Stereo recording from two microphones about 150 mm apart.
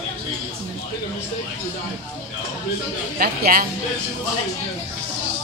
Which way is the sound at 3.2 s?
75° right (ahead or behind).